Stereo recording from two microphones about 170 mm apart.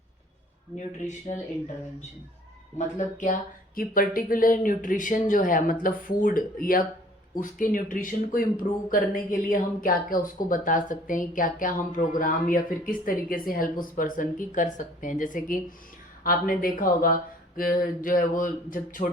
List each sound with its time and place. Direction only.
0.8 s speech: 45° left (ahead or behind)